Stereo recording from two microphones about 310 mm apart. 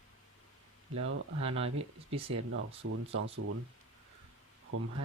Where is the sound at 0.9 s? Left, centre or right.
Right.